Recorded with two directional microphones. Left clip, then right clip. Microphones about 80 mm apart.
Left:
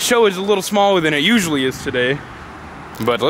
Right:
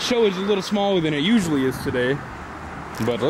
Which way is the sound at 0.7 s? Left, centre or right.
Right.